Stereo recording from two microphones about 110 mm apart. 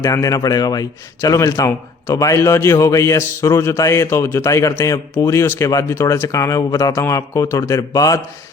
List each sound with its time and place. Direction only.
0.0 s a man's voice: 30° left (ahead or behind)